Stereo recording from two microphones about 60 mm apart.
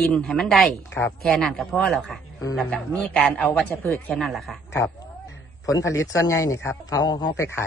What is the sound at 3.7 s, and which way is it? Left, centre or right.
Speech, left.